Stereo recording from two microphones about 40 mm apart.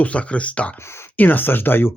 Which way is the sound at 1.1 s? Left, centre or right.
Left.